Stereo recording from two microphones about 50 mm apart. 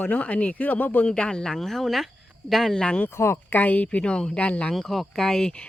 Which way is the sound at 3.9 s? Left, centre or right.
Left.